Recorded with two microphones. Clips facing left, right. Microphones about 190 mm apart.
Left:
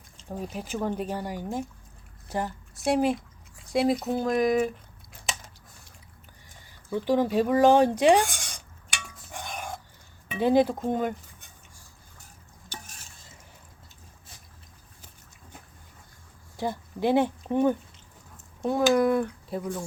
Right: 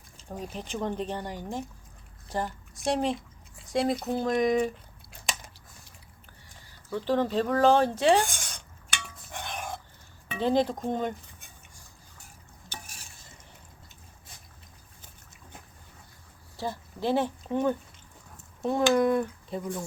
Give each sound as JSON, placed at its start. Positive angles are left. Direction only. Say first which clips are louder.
{"t": 0.5, "sound": "speech", "louder": "left 2 dB", "side_deg": 5}
{"t": 6.9, "sound": "speech", "louder": "left 3 dB", "side_deg": 15}
{"t": 8.9, "sound": "dishes", "louder": "right 1 dB", "side_deg": 10}
{"t": 10.3, "sound": "speech", "louder": "left 4 dB", "side_deg": 10}
{"t": 16.6, "sound": "speech", "louder": "left 4 dB", "side_deg": 15}
{"t": 18.6, "sound": "speech", "louder": "left 1 dB", "side_deg": 5}